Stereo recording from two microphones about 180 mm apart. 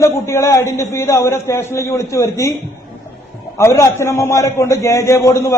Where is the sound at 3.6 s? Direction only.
15° left (ahead or behind).